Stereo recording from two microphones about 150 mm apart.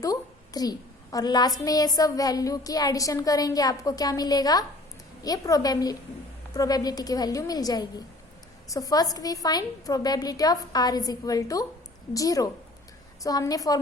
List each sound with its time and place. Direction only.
0.0 s a child's voice: 25° left (ahead or behind)